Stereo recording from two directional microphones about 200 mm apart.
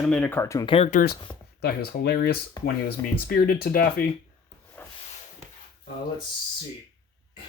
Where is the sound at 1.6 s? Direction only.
50° left (ahead or behind).